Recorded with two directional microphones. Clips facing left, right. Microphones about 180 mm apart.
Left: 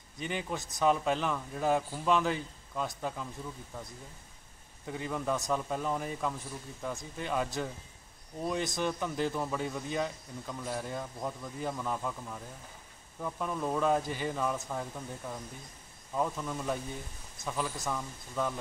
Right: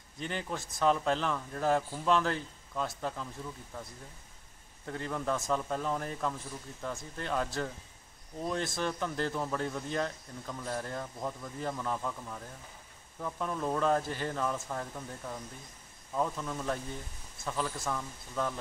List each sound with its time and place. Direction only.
0.2 s a man's voice: 5° left (ahead or behind)
4.8 s a man's voice: 5° left (ahead or behind)